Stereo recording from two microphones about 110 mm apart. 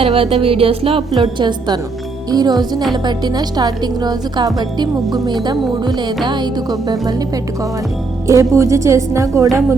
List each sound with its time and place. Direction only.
0.0 s music: 60° right (ahead or behind)
1.1 s a woman's voice: 45° right (ahead or behind); by 9.5 s 30° right (ahead or behind)